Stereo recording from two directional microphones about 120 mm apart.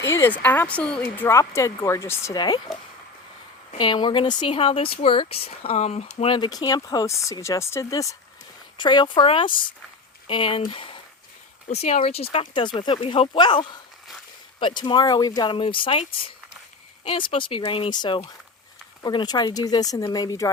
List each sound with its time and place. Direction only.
0.0 s speech: 20° left (ahead or behind)
2.3 s speech: 35° left (ahead or behind)
3.8 s speech: 40° left (ahead or behind)
5.5 s speech: 65° left (ahead or behind)
6.3 s speech: 35° left (ahead or behind)
8.8 s speech: 40° left (ahead or behind)
11.7 s speech: 70° left (ahead or behind); by 15.3 s 35° left (ahead or behind)
15.4 s speech: 45° left (ahead or behind)